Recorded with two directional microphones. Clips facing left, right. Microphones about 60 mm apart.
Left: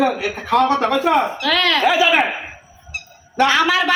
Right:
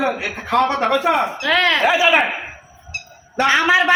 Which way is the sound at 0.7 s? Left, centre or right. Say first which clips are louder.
Left 1 dB; right.